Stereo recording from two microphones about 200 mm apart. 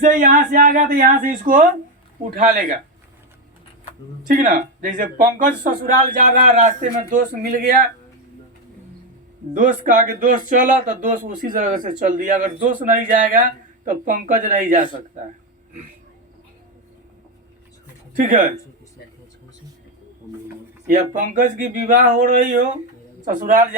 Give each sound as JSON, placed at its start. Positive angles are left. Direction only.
{"t": 0.0, "sound": "speech", "side_deg": -40}
{"t": 4.3, "sound": "speech", "side_deg": -45}
{"t": 9.6, "sound": "speech", "side_deg": -40}
{"t": 18.2, "sound": "speech", "side_deg": -40}
{"t": 20.8, "sound": "speech", "side_deg": -40}